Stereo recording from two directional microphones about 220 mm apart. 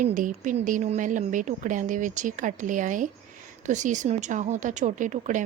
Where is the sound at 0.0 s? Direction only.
35° right (ahead or behind).